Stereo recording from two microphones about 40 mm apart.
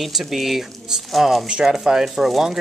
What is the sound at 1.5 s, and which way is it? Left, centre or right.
Speech, right.